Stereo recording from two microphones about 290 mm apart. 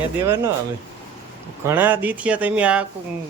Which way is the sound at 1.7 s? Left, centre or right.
Centre.